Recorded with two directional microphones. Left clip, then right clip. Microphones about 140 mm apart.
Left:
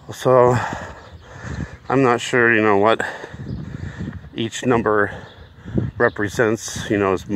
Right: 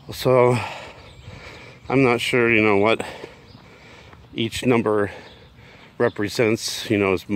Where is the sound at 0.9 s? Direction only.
25° right (ahead or behind).